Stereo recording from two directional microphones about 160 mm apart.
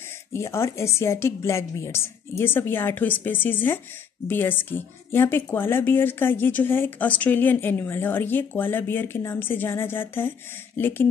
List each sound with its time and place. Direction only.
0.3 s speech: 15° left (ahead or behind)